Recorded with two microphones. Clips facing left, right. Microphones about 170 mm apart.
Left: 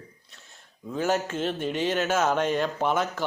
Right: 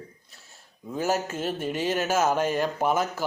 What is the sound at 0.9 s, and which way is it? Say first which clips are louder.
Speech: left 1 dB; 10° right (ahead or behind).